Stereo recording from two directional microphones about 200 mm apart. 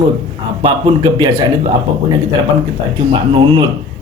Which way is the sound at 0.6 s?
25° right (ahead or behind).